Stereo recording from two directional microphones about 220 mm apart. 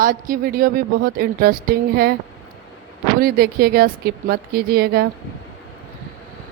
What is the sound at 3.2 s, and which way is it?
Speech, 45° right (ahead or behind).